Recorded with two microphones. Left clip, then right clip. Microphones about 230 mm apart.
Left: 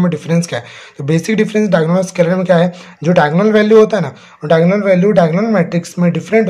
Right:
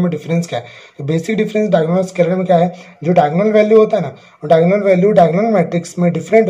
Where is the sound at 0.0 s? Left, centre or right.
Left.